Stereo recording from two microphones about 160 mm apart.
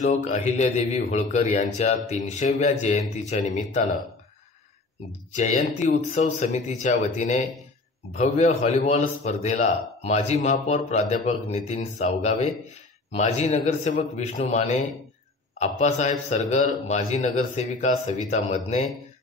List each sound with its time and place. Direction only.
0.0 s a man's voice: 45° left (ahead or behind)
5.3 s a man's voice: 50° left (ahead or behind)